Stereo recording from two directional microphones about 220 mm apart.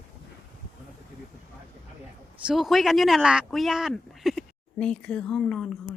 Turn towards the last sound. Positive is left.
turn(degrees=5)  # may be behind; listen again after turning